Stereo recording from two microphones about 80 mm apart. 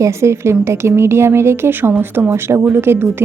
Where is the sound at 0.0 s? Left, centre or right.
Right.